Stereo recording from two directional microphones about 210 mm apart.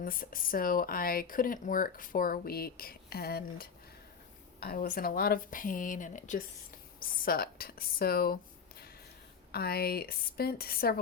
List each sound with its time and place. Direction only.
0.0 s speech: 40° left (ahead or behind)